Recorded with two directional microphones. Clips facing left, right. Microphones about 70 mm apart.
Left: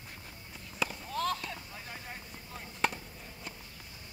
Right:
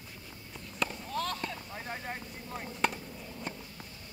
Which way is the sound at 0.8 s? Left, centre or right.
Centre.